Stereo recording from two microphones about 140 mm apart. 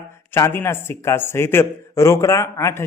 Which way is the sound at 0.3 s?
20° left (ahead or behind).